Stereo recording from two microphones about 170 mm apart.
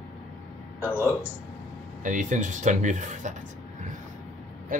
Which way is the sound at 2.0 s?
50° right (ahead or behind).